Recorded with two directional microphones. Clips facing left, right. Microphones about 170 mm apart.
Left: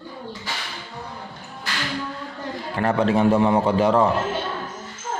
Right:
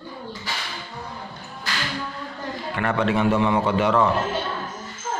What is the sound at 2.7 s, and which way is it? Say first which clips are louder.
A man's voice: left 3 dB; 35° left (ahead or behind).